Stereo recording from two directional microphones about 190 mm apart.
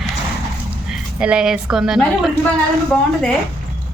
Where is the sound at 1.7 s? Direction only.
Centre (ahead or behind).